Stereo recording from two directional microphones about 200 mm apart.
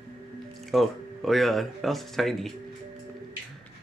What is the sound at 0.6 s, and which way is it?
Speech, centre (ahead or behind).